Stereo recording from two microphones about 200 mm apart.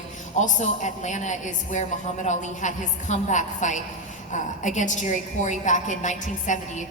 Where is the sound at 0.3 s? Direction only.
40° left (ahead or behind).